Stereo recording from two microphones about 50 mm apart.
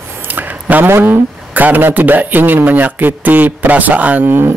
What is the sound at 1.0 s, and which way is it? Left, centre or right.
Speech, right.